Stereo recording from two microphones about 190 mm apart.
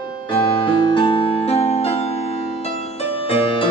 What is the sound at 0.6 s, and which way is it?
Music, 25° left (ahead or behind).